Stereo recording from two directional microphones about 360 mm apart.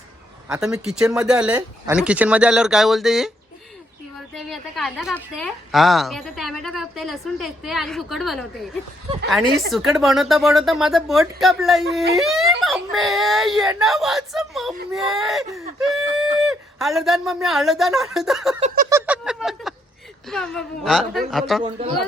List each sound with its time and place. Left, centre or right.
0.4 s speech: centre
4.4 s speech: centre
9.7 s speech: centre
18.6 s a sound: right
18.9 s speech: centre